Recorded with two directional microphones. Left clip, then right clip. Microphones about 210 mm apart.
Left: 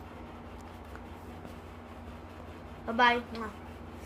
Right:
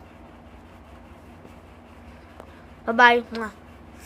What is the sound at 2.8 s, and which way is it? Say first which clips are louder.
Speech: right 10 dB; 55° right (ahead or behind).